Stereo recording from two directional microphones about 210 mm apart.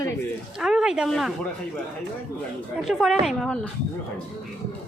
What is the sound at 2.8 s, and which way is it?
Speech, centre (ahead or behind).